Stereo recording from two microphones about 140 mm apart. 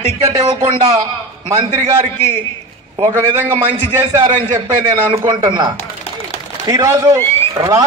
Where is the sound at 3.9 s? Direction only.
20° right (ahead or behind).